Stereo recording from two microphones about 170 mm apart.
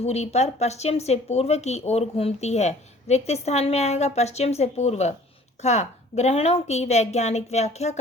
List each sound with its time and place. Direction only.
0.0 s a woman's voice: 40° left (ahead or behind)